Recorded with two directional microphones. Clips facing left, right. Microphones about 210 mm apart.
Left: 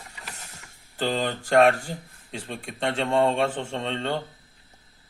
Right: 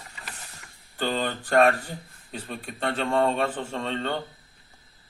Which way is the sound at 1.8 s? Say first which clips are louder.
Left 3 dB; 30° left (ahead or behind).